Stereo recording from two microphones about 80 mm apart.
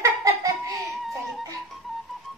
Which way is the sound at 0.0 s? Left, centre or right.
Right.